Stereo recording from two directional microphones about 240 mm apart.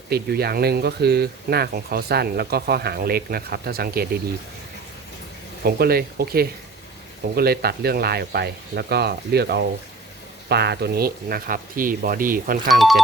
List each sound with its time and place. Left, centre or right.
0.1 s speech: right
5.6 s speech: right